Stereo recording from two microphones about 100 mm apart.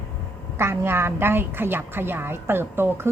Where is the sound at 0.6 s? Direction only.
25° right (ahead or behind).